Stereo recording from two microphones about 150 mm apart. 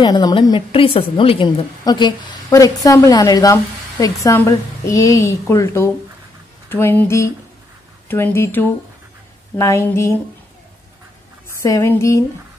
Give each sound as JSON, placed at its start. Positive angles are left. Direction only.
{"t": 0.0, "sound": "a woman's voice", "side_deg": 25}
{"t": 11.5, "sound": "speech", "side_deg": 20}